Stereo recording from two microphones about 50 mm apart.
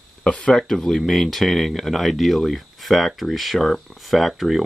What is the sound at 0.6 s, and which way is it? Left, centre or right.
Speech, centre.